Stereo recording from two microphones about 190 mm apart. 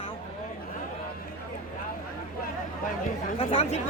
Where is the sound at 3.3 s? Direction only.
35° left (ahead or behind).